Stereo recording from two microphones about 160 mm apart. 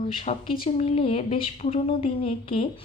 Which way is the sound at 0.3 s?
45° left (ahead or behind).